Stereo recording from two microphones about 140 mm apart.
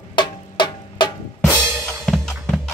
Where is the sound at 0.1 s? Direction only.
30° left (ahead or behind).